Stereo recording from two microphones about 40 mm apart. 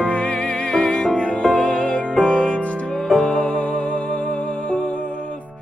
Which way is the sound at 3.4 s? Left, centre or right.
Centre.